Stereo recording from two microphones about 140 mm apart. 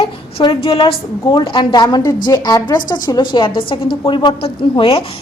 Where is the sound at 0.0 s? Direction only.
40° left (ahead or behind).